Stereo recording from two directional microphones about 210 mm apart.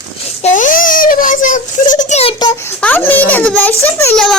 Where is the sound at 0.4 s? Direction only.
35° left (ahead or behind).